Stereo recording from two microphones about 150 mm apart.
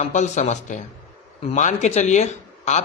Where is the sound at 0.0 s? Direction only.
55° left (ahead or behind).